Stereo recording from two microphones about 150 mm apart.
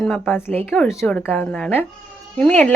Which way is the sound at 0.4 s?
15° left (ahead or behind).